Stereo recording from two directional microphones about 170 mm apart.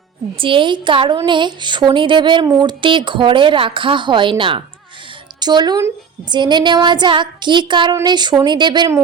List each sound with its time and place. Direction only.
0.3 s a woman's voice: 30° right (ahead or behind)